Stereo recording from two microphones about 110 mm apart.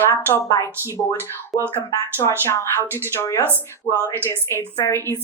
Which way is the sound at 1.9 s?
25° left (ahead or behind).